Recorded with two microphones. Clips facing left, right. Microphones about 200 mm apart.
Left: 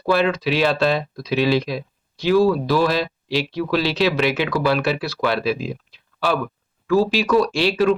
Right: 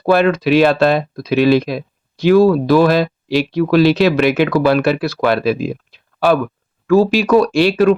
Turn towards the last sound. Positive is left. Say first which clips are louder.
# right 6 dB
turn(degrees=-55)  # may be behind; listen again after turning